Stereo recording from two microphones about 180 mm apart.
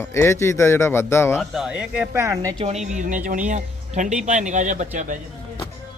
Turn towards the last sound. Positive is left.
turn(degrees=-45)  # may be behind; listen again after turning